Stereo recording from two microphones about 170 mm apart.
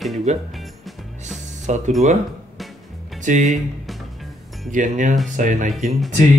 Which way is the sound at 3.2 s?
50° right (ahead or behind).